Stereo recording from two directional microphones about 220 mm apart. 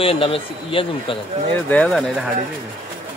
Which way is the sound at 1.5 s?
5° left (ahead or behind).